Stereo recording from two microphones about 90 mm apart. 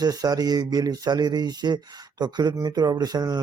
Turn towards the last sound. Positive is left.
turn(degrees=-45)  # may be behind; listen again after turning